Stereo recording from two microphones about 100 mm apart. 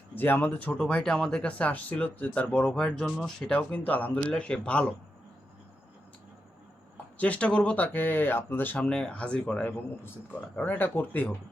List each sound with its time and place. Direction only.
0.2 s speech: 20° left (ahead or behind)
6.9 s speech: 15° left (ahead or behind)